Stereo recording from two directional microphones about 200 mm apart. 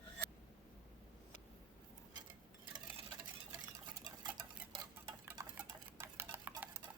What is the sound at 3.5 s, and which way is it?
Stir, 20° right (ahead or behind).